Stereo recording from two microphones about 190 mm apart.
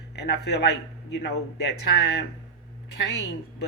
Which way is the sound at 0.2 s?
60° left (ahead or behind).